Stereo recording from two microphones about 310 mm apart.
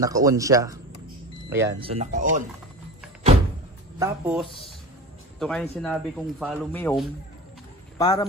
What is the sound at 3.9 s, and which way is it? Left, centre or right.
A man's voice, centre.